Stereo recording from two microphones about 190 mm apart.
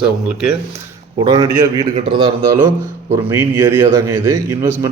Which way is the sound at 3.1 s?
15° right (ahead or behind).